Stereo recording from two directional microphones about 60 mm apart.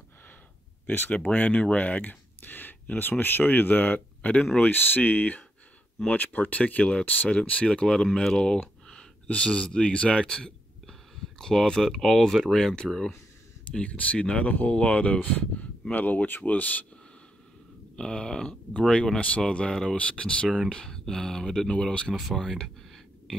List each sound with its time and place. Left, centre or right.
0.8 s speech: left
1.1 s speech: left
13.7 s speech: left
17.9 s speech: centre
19.7 s speech: centre
20.0 s speech: centre
22.4 s a sound: centre